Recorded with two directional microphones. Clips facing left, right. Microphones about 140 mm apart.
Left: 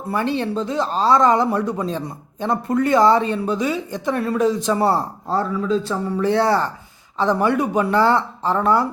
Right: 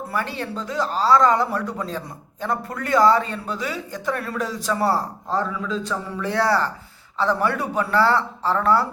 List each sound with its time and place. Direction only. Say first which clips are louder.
0.1 s speech: left 8 dB; 25° left (ahead or behind)
5.3 s a man's voice: left 5 dB; 35° left (ahead or behind); by 8.9 s 20° left (ahead or behind)